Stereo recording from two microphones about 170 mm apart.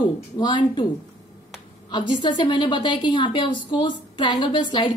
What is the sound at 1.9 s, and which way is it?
A woman's voice, 25° left (ahead or behind).